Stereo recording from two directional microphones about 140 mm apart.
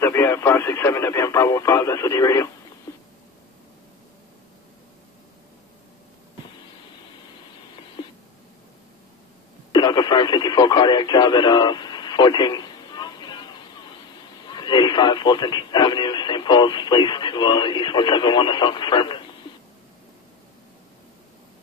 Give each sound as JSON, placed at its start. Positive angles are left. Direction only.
{"t": 0.0, "sound": "radio", "side_deg": 20}
{"t": 2.9, "sound": "a sound", "side_deg": 25}
{"t": 9.7, "sound": "radio", "side_deg": 30}
{"t": 14.4, "sound": "speech", "side_deg": 30}